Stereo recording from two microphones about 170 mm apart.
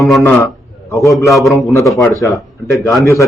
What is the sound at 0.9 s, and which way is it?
Speech, 20° left (ahead or behind).